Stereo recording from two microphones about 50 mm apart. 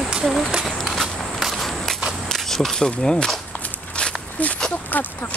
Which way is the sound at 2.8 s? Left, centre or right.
Centre.